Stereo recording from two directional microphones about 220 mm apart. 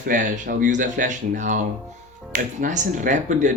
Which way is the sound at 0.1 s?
35° right (ahead or behind).